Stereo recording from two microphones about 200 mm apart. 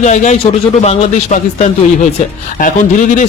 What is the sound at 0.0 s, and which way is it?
Speech, 35° left (ahead or behind).